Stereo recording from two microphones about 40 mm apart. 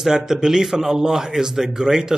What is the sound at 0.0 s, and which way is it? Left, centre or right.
A man's voice, centre.